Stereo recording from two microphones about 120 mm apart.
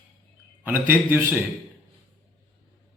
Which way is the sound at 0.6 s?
15° right (ahead or behind).